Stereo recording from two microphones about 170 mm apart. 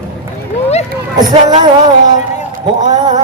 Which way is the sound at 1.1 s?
25° right (ahead or behind).